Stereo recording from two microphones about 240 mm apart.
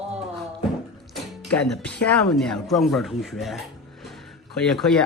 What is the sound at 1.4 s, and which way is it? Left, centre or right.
Speech, centre.